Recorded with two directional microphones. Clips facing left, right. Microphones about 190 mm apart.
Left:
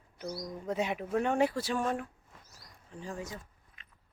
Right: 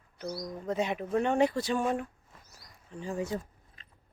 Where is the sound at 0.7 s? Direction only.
10° left (ahead or behind).